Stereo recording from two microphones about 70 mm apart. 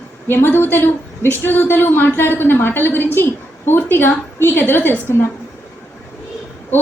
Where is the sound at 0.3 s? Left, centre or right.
Left.